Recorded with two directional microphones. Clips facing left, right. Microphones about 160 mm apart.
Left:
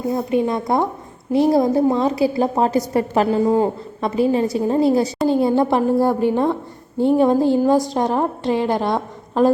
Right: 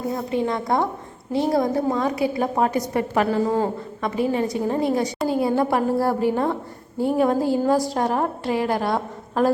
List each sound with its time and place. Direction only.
0.1 s a woman's voice: 20° left (ahead or behind)